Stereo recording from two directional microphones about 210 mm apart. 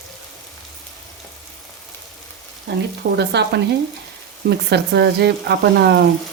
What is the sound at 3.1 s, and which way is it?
A woman's voice, 55° right (ahead or behind).